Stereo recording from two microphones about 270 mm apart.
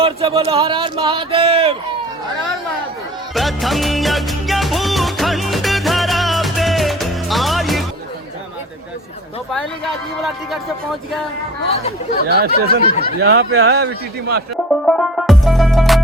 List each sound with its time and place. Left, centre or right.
0.0 s speech: right
3.3 s music: centre
9.5 s speech: centre
12.3 s speech: right
12.8 s speech: left
13.1 s speech: right
13.7 s speech: right
14.7 s music: centre